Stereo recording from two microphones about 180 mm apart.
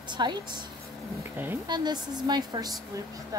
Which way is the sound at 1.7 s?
25° right (ahead or behind).